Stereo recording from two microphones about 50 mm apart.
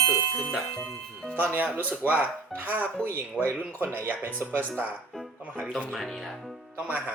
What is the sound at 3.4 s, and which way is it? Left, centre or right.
Speech, right.